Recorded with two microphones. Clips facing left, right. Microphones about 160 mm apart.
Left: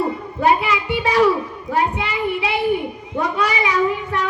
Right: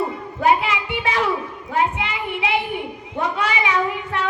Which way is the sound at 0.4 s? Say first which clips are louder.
Left 1 dB; 35° left (ahead or behind).